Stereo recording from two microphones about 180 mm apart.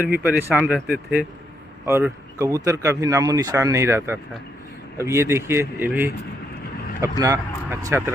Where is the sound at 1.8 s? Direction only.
15° right (ahead or behind).